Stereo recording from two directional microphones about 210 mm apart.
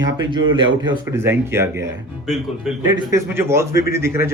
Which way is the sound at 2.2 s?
Centre (ahead or behind).